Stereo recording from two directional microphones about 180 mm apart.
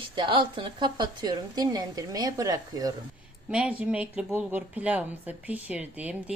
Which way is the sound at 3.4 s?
10° right (ahead or behind).